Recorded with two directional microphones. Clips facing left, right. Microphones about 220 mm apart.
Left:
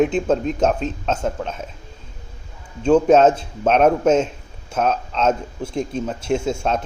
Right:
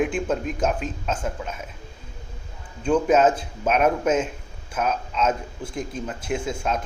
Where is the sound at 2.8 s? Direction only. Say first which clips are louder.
Left 5 dB; 25° left (ahead or behind).